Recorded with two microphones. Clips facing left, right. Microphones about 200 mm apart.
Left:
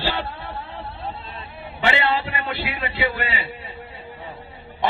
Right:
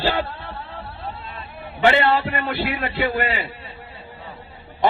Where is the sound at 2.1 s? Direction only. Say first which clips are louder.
Right 3 dB; 50° right (ahead or behind).